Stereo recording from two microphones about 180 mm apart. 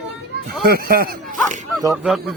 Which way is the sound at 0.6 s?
55° right (ahead or behind).